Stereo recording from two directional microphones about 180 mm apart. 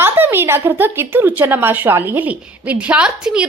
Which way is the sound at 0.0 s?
10° right (ahead or behind).